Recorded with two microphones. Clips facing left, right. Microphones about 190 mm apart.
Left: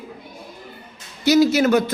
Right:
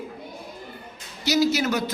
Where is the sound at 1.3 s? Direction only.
55° left (ahead or behind).